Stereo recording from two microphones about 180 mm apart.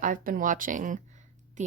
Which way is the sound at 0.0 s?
50° right (ahead or behind).